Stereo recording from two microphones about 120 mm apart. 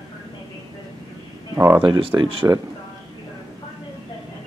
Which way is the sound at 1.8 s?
45° right (ahead or behind).